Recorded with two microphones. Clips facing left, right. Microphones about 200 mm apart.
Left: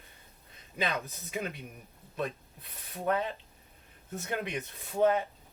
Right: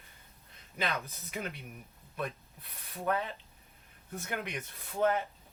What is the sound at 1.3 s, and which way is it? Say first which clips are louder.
Speech: left 3 dB; 15° left (ahead or behind).